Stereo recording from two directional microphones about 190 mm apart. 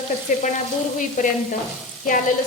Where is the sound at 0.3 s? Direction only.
45° left (ahead or behind).